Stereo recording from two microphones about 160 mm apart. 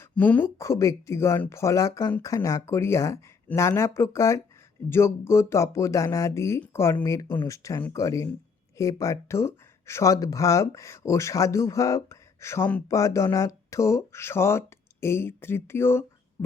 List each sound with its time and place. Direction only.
0.0 s speech: 10° left (ahead or behind)